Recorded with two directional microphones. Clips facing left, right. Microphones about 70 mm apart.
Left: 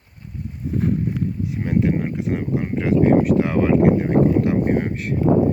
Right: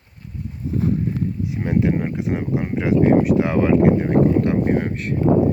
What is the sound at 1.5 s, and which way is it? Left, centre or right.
Speech, centre.